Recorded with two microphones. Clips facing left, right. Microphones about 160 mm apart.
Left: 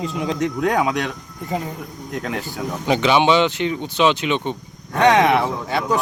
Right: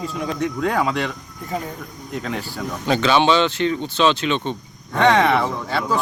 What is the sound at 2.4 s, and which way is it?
Speech, 20° left (ahead or behind).